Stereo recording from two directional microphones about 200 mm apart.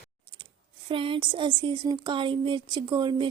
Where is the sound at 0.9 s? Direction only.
25° right (ahead or behind).